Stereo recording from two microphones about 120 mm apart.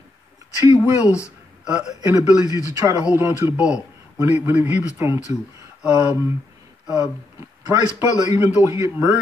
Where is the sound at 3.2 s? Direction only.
20° right (ahead or behind).